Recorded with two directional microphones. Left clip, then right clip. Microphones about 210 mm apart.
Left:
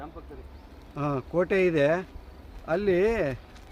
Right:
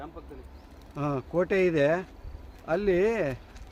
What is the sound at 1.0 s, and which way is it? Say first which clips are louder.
Speech: left 1 dB; 5° right (ahead or behind).